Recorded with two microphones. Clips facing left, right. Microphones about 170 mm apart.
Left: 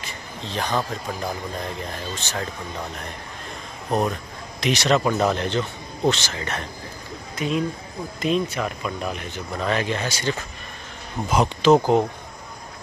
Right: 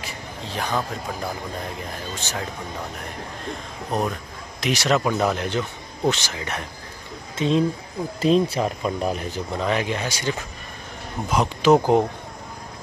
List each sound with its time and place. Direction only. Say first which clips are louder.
0.0 s a sound: right 1 dB; 5° right (ahead or behind)
2.1 s speech: even; 10° right (ahead or behind)
4.6 s speech: left 1 dB; 5° right (ahead or behind)
7.3 s speech: right 4 dB; 30° right (ahead or behind)
9.5 s speech: even; 15° right (ahead or behind)
11.2 s speech: left 2 dB; centre (ahead or behind)
11.6 s speech: even; 15° right (ahead or behind)